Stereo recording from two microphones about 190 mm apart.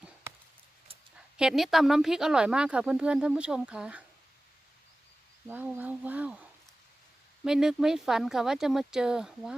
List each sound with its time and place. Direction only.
0.9 s a sound: 30° right (ahead or behind)
1.4 s speech: centre (ahead or behind)
5.5 s speech: 10° right (ahead or behind)
7.4 s speech: 5° right (ahead or behind)